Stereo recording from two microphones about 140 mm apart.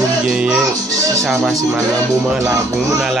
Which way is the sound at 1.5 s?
20° right (ahead or behind).